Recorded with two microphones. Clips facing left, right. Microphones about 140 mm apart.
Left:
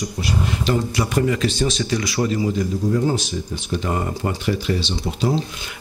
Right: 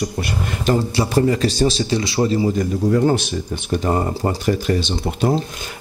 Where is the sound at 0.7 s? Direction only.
35° right (ahead or behind).